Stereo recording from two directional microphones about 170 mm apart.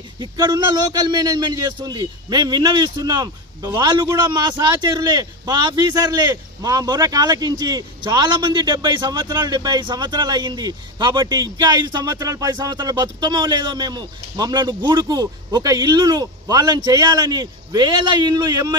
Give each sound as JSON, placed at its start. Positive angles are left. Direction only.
{"t": 0.2, "sound": "a man's voice", "side_deg": -25}